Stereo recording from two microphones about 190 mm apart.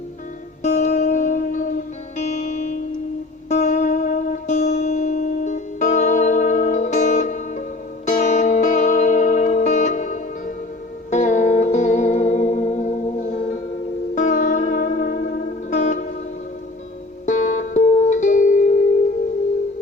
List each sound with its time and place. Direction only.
0.6 s music: 35° left (ahead or behind)
17.2 s music: 40° left (ahead or behind)